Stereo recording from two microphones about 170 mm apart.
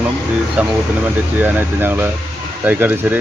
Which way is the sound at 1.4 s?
10° right (ahead or behind).